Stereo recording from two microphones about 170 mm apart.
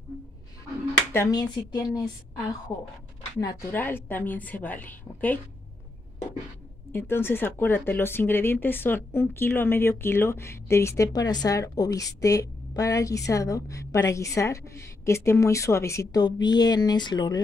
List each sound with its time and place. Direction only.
1.1 s a woman's voice: 15° left (ahead or behind)
3.3 s speech: 20° left (ahead or behind)
6.9 s speech: 15° left (ahead or behind)